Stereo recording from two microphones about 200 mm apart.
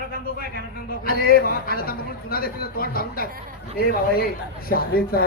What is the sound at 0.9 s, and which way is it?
A man's voice, 45° left (ahead or behind).